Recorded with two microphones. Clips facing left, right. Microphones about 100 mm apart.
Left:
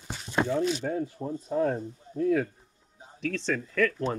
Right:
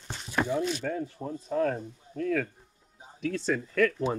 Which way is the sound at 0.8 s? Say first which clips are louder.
Left 2 dB; 25° left (ahead or behind).